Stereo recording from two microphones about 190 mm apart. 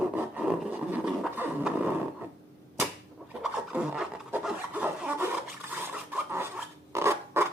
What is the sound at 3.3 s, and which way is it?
Filing, 5° right (ahead or behind).